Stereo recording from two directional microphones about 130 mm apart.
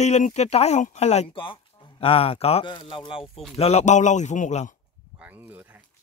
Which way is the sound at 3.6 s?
55° left (ahead or behind).